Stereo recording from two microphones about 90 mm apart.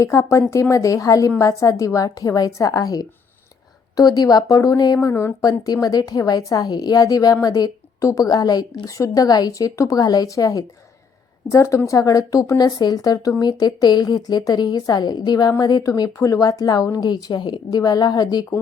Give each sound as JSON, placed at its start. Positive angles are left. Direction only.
{"t": 0.0, "sound": "a woman's voice", "side_deg": 35}
{"t": 4.9, "sound": "speech", "side_deg": 30}
{"t": 5.4, "sound": "a woman's voice", "side_deg": 45}